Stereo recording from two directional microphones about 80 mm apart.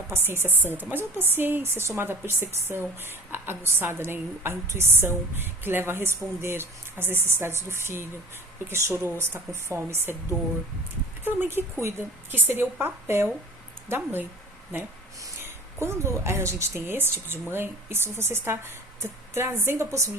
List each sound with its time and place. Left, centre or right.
0.1 s a woman's voice: right
11.3 s a woman's voice: right